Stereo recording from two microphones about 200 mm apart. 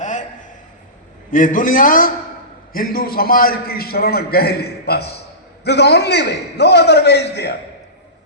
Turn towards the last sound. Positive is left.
turn(degrees=55)  # may be behind; listen again after turning